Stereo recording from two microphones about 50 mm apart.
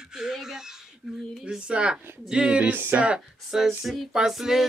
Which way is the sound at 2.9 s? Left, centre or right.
Right.